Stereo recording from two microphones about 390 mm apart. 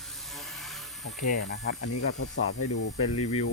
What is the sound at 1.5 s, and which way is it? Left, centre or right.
Speech, left.